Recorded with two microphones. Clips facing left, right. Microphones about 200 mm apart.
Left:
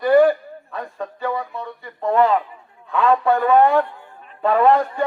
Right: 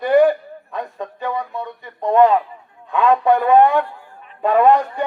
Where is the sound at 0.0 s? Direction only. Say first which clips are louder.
Even; 20° right (ahead or behind).